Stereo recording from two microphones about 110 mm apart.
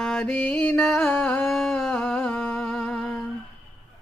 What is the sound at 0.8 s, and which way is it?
Mantra, centre (ahead or behind).